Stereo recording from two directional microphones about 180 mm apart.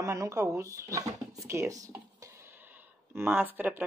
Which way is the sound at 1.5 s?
15° right (ahead or behind).